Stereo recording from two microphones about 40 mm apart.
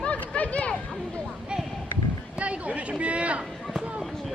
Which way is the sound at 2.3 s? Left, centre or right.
Right.